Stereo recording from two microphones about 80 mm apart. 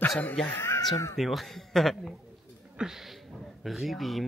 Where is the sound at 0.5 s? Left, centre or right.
Left.